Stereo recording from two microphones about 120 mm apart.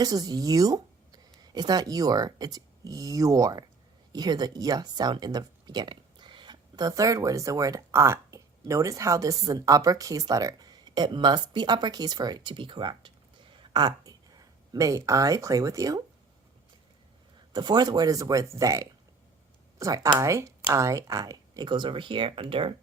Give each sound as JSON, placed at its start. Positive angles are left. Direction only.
{"t": 0.0, "sound": "speech", "side_deg": -30}
{"t": 17.5, "sound": "speech", "side_deg": -35}